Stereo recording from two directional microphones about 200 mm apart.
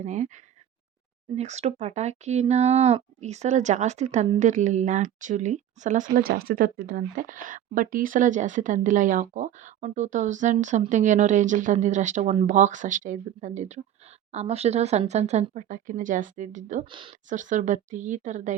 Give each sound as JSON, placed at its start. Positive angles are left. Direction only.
{"t": 0.0, "sound": "speech", "side_deg": -35}
{"t": 16.8, "sound": "speech", "side_deg": -25}
{"t": 17.2, "sound": "speech", "side_deg": -40}